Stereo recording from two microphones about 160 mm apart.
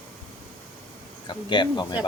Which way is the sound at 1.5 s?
30° left (ahead or behind).